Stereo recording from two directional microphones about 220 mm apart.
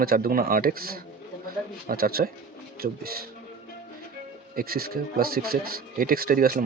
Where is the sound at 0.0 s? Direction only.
40° right (ahead or behind).